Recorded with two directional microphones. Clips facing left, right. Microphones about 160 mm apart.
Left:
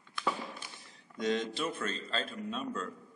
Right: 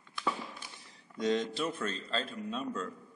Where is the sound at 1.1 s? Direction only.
35° right (ahead or behind).